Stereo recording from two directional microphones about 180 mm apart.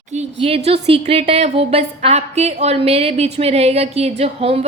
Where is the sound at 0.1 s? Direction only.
35° right (ahead or behind).